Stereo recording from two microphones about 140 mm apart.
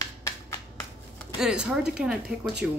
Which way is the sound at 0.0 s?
20° left (ahead or behind).